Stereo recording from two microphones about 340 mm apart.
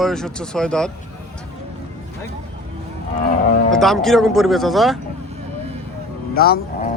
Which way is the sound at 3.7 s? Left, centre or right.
Centre.